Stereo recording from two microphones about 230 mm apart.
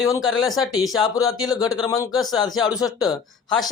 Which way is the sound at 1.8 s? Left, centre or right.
Centre.